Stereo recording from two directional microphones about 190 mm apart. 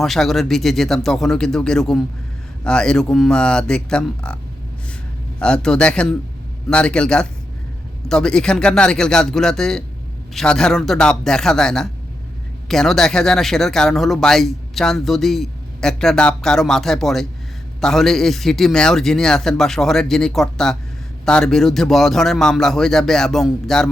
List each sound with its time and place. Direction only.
0.0 s speech: centre (ahead or behind)
5.4 s speech: 5° left (ahead or behind)